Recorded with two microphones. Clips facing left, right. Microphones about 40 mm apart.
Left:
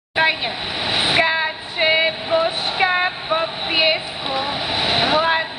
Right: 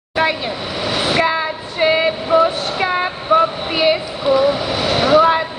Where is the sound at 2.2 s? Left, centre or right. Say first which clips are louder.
Right 5 dB; centre.